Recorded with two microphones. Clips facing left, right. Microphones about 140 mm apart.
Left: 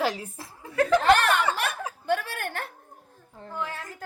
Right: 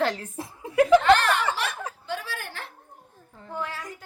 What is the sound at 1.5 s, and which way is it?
Chuckle, 50° left (ahead or behind).